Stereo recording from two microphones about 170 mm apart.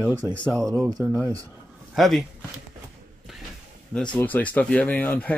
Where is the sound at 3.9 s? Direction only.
5° left (ahead or behind).